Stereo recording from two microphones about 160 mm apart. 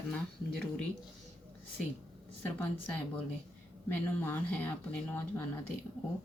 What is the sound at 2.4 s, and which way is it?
A woman's voice, 10° left (ahead or behind).